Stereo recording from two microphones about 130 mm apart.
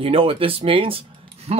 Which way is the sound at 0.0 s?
45° right (ahead or behind).